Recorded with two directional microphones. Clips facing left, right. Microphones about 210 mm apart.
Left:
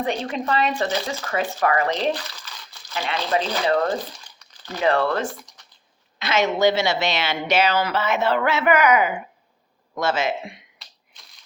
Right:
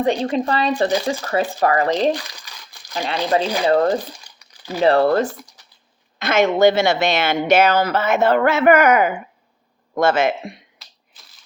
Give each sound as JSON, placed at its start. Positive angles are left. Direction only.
{"t": 0.0, "sound": "speech", "side_deg": -35}
{"t": 2.5, "sound": "crumpling", "side_deg": -15}
{"t": 2.9, "sound": "speech", "side_deg": -35}
{"t": 3.9, "sound": "crumpling", "side_deg": -10}
{"t": 4.8, "sound": "speech", "side_deg": -35}
{"t": 6.1, "sound": "speech", "side_deg": -50}
{"t": 10.8, "sound": "a sound", "side_deg": -5}